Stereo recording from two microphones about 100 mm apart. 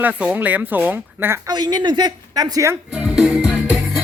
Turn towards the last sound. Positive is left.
turn(degrees=-5)  # may be behind; listen again after turning